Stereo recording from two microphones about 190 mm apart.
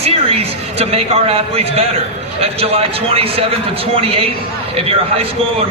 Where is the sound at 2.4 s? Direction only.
30° right (ahead or behind).